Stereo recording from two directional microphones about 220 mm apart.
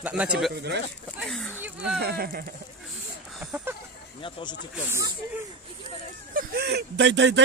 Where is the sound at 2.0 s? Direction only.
45° right (ahead or behind).